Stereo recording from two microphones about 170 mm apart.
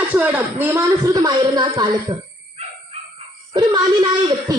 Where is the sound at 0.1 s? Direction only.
10° right (ahead or behind).